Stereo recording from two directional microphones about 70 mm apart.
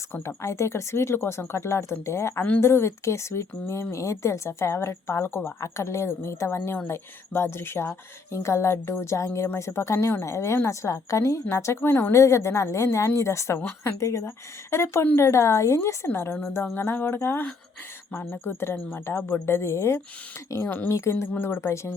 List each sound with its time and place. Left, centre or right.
0.1 s a woman's voice: left
12.1 s a woman's voice: left
20.7 s speech: left
20.9 s speech: left